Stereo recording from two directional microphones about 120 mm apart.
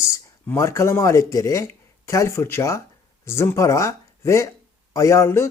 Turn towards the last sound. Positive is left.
turn(degrees=20)  # may be behind; listen again after turning